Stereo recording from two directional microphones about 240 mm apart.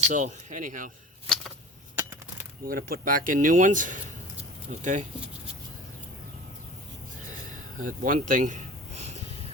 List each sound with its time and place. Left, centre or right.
0.1 s speech: right
2.0 s a sound: centre
2.6 s speech: right
7.8 s speech: right